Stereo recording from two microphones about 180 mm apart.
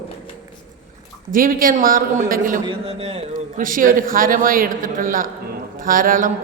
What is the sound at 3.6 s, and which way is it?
A man's voice, 50° right (ahead or behind).